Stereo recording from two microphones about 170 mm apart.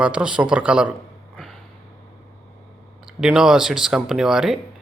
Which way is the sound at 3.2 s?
5° right (ahead or behind).